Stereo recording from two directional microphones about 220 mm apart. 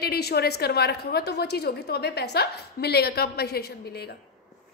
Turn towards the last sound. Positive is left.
turn(degrees=45)  # may be behind; listen again after turning